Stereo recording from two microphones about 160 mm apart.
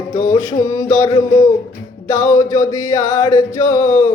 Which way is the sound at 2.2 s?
25° left (ahead or behind).